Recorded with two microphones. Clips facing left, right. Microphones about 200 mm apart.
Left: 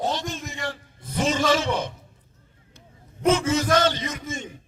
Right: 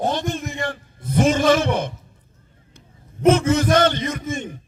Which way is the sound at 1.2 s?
50° right (ahead or behind).